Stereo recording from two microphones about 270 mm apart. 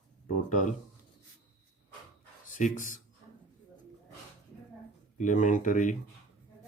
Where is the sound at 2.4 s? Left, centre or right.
Left.